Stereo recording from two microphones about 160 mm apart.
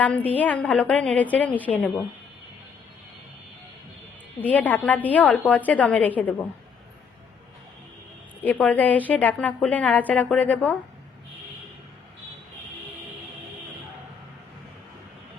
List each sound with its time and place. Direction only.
0.0 s a woman's voice: 10° left (ahead or behind)
4.4 s a woman's voice: 10° left (ahead or behind)
8.4 s a woman's voice: 10° left (ahead or behind)